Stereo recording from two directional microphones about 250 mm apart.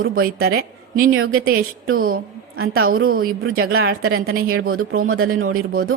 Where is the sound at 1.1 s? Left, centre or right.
Right.